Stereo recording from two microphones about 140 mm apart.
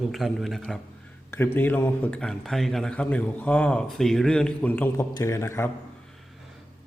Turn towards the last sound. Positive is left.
turn(degrees=20)  # may be behind; listen again after turning